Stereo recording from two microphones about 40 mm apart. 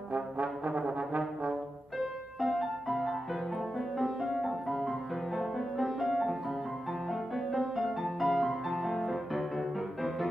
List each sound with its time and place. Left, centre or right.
0.1 s brass instrument: right
2.4 s music: centre